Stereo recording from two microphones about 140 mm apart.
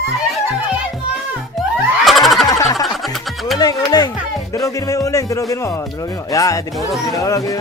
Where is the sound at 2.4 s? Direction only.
25° left (ahead or behind).